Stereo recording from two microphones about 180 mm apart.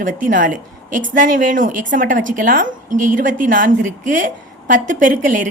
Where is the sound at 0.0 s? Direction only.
45° right (ahead or behind).